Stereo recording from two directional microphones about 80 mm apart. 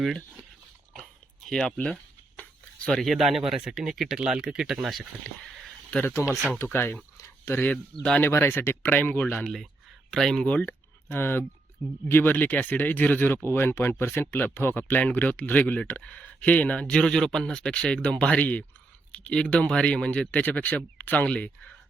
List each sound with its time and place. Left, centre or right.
1.5 s speech: centre
5.9 s speech: centre
7.7 s speech: centre
8.2 s speech: left
9.4 s speech: centre
10.4 s speech: centre